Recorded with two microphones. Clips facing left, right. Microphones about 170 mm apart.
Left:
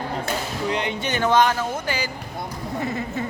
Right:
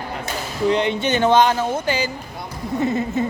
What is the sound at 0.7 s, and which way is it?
Speech, 25° right (ahead or behind).